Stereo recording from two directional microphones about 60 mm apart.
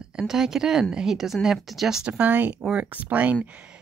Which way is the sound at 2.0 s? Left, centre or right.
Right.